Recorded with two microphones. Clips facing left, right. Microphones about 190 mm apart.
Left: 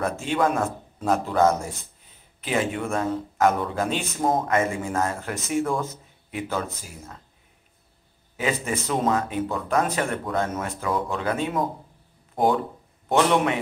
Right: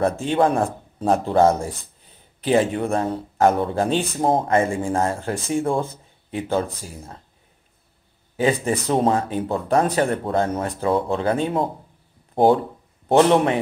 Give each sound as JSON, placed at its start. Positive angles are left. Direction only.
{"t": 0.2, "sound": "a man's voice", "side_deg": -30}
{"t": 8.4, "sound": "a man's voice", "side_deg": -35}